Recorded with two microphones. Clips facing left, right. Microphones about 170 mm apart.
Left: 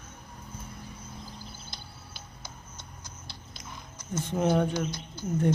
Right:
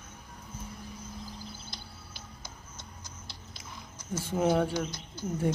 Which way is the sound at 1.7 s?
60° left (ahead or behind).